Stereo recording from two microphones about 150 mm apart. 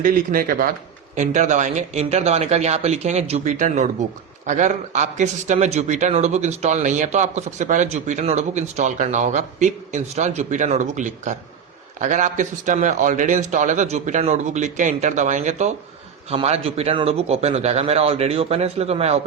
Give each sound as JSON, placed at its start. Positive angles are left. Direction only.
{"t": 0.0, "sound": "speech", "side_deg": -65}
{"t": 1.1, "sound": "a man's voice", "side_deg": -55}